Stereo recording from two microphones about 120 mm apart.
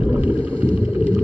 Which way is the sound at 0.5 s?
30° right (ahead or behind).